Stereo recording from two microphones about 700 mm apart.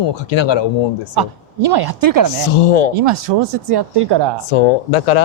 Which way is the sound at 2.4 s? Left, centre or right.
Left.